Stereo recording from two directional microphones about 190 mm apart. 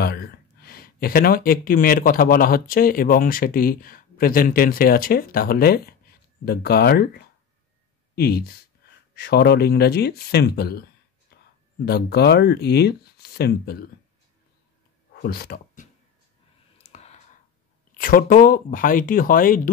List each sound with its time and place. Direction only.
0.0 s speech: 55° left (ahead or behind)
15.1 s speech: 55° left (ahead or behind)
16.7 s clicking: 35° left (ahead or behind)
17.9 s speech: 50° left (ahead or behind)